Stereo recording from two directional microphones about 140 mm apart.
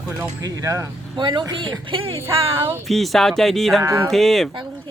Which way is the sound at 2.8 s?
Centre (ahead or behind).